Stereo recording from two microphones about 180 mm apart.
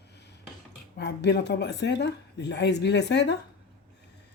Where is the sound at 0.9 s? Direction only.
70° left (ahead or behind).